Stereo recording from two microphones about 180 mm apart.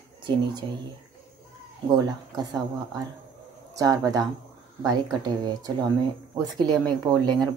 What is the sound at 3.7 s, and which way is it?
Speech, 20° right (ahead or behind).